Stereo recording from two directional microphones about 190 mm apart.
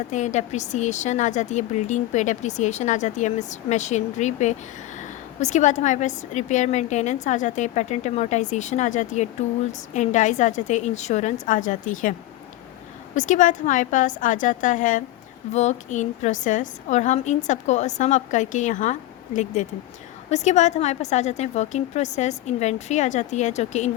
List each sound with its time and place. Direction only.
0.1 s speech: 40° left (ahead or behind)
13.1 s a woman's voice: 40° left (ahead or behind)